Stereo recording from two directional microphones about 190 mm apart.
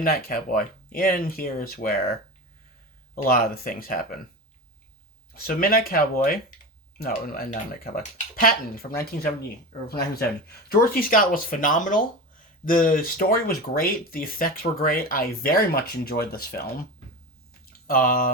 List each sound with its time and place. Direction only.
0.0 s speech: 50° left (ahead or behind)
3.2 s speech: 50° left (ahead or behind)
5.3 s speech: 50° left (ahead or behind)
10.7 s speech: 50° left (ahead or behind)
17.8 s speech: 50° left (ahead or behind)